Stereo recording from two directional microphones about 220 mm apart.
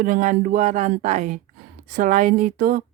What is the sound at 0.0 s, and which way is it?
Speech, 35° right (ahead or behind).